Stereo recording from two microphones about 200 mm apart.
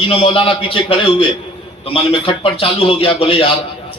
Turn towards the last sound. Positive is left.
turn(degrees=25)  # may be behind; listen again after turning